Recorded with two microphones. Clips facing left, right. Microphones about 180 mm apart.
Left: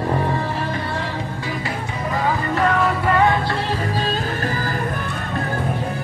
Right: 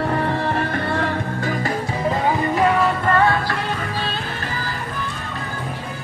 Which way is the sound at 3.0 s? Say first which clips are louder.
Even; 15° left (ahead or behind).